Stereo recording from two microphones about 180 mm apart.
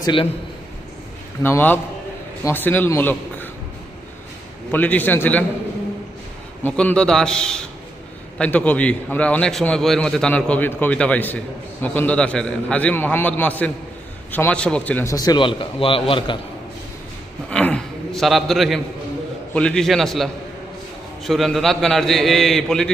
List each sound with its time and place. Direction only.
0.0 s a man's voice: 25° left (ahead or behind)
1.4 s a man's voice: 10° left (ahead or behind)
4.7 s a man's voice: 10° left (ahead or behind)
6.6 s a man's voice: 10° left (ahead or behind); by 16.4 s 25° left (ahead or behind)
17.5 s a man's voice: 5° left (ahead or behind)